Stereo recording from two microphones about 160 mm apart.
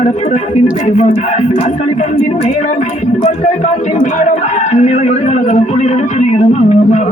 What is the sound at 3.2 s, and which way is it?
A man's voice, 45° left (ahead or behind).